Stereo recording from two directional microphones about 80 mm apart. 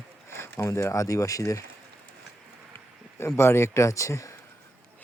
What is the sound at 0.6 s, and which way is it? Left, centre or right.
Speech, left.